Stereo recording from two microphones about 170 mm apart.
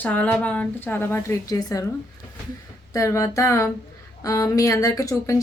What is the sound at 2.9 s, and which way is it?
Speech, 20° left (ahead or behind).